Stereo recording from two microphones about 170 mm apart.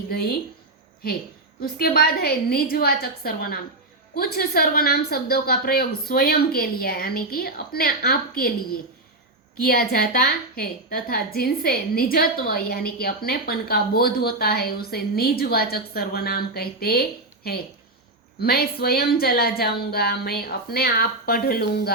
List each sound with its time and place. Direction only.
0.1 s a woman's voice: 65° left (ahead or behind)
1.6 s a woman's voice: 65° left (ahead or behind)
9.6 s a woman's voice: 65° left (ahead or behind)